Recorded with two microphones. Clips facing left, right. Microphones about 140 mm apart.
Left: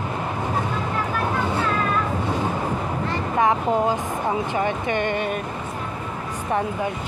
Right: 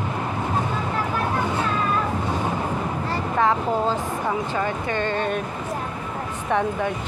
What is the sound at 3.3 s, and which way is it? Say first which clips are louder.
Speech: left 2 dB; 15° left (ahead or behind).